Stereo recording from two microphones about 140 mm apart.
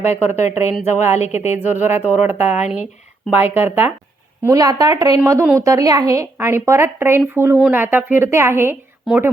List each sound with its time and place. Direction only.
0.0 s speech: 55° left (ahead or behind)
1.8 s a woman's voice: 15° right (ahead or behind)
4.4 s a woman's voice: 25° right (ahead or behind)